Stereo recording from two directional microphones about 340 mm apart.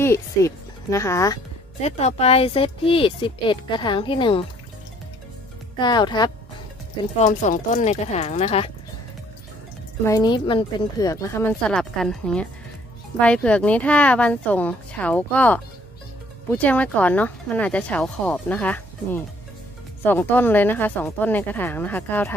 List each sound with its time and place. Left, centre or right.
0.0 s speech: centre
5.8 s speech: centre
10.0 s speech: centre